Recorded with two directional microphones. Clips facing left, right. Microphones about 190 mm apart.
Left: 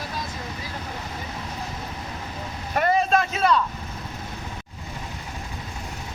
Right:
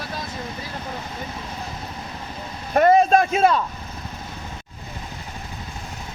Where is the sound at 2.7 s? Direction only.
45° right (ahead or behind).